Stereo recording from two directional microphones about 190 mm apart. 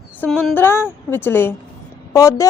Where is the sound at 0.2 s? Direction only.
5° left (ahead or behind).